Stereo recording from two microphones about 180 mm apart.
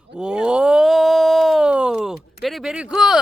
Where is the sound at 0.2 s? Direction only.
5° right (ahead or behind).